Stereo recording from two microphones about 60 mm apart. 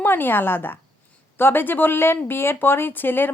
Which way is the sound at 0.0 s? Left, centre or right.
Left.